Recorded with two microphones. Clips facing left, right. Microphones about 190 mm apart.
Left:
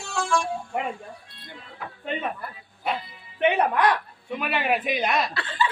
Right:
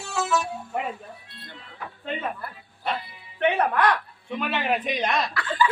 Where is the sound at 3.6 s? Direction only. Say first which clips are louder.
Left 1 dB; 15° left (ahead or behind).